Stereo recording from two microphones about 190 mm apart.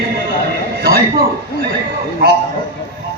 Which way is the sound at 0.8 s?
55° right (ahead or behind).